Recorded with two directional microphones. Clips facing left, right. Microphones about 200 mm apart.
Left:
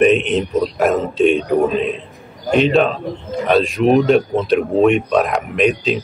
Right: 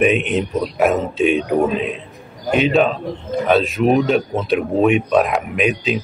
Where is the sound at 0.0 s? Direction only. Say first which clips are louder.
Left 3 dB; 5° right (ahead or behind).